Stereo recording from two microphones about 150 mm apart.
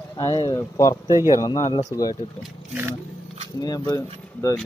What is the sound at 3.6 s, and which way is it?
Speech, 25° left (ahead or behind).